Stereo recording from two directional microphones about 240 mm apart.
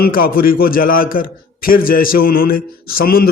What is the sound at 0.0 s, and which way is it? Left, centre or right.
A man's voice, left.